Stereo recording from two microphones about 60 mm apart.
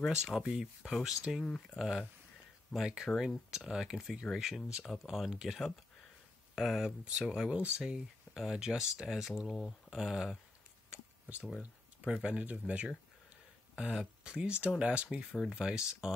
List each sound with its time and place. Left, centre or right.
0.2 s speech: centre
1.4 s speech: centre
1.8 s speech: centre
10.9 s a sound: right
12.0 s speech: centre
13.7 s speech: centre
15.3 s speech: centre
15.6 s speech: centre